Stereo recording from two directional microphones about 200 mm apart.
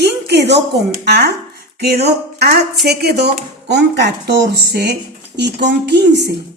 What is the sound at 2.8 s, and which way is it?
A woman's voice, 55° right (ahead or behind).